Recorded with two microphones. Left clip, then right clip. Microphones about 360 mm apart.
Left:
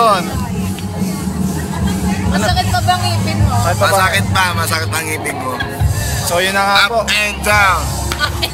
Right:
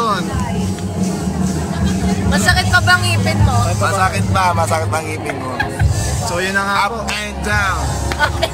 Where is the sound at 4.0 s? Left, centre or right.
Centre.